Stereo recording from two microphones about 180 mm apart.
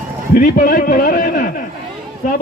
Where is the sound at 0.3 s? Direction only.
55° left (ahead or behind).